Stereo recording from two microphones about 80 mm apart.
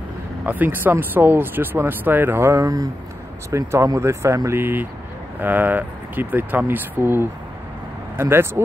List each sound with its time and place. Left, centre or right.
0.5 s speech: right